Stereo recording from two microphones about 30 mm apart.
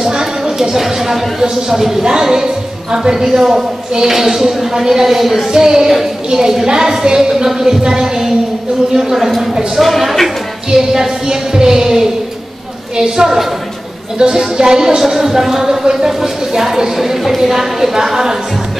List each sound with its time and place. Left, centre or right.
0.1 s a woman's voice: centre
2.0 s a woman's voice: right; by 5.4 s centre
5.5 s music: right
6.3 s a woman's voice: centre
7.8 s music: right
8.9 s a woman's voice: centre
9.8 s speech: centre
10.7 s music: centre
14.6 s a woman's voice: centre
17.0 s a woman's voice: centre